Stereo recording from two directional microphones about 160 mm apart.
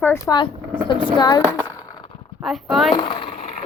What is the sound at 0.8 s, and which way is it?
Speech, 30° left (ahead or behind).